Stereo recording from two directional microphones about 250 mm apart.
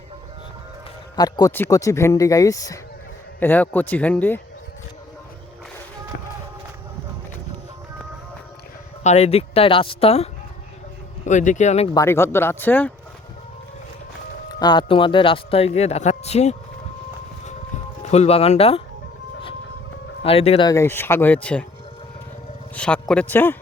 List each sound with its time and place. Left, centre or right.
1.1 s speech: centre
9.0 s speech: left
11.3 s speech: left
11.9 s speech: centre
14.6 s speech: centre
18.0 s speech: left
20.2 s speech: left; by 21.6 s centre
22.7 s speech: centre